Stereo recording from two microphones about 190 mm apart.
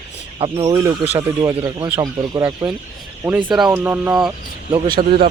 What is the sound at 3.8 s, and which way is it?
Speech, 10° right (ahead or behind).